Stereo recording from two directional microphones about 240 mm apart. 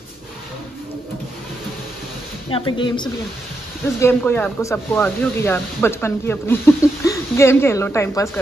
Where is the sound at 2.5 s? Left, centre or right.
Centre.